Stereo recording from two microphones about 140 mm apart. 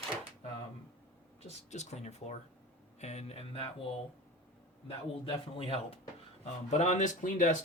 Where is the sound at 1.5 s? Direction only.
55° left (ahead or behind).